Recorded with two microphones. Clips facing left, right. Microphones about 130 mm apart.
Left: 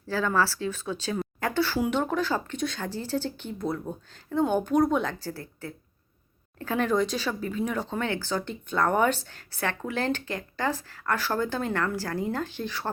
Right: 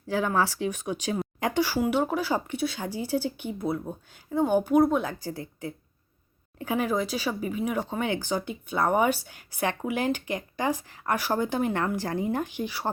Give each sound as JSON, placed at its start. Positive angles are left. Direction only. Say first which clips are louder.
{"t": 0.1, "sound": "speech", "louder": "even", "side_deg": -15}
{"t": 5.2, "sound": "speech", "louder": "right 2 dB", "side_deg": -15}